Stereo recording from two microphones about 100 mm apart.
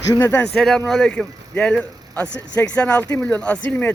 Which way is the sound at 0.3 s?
10° left (ahead or behind).